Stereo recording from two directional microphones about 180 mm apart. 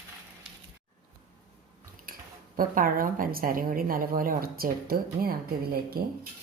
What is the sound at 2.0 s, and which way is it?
Speech, 50° right (ahead or behind).